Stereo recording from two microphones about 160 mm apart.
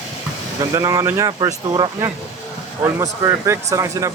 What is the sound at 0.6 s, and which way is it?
Speech, 20° right (ahead or behind).